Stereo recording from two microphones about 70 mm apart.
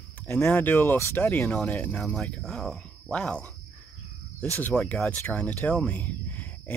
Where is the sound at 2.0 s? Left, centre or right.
Centre.